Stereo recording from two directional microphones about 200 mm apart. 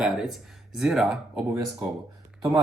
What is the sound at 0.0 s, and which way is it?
Speech, centre (ahead or behind).